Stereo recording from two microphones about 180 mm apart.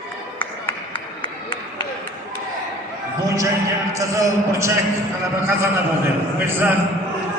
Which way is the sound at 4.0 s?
15° right (ahead or behind).